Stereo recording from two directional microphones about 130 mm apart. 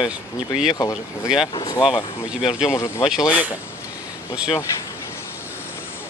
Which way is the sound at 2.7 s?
20° left (ahead or behind).